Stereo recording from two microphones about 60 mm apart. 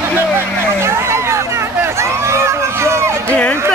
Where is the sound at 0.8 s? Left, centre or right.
Right.